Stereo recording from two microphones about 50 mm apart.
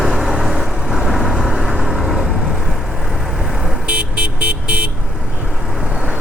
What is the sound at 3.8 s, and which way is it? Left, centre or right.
Vehicle, right.